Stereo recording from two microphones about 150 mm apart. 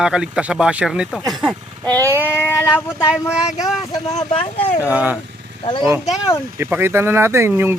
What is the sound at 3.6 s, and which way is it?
Speech, centre (ahead or behind).